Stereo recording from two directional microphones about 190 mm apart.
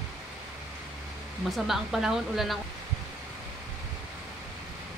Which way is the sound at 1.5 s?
Centre (ahead or behind).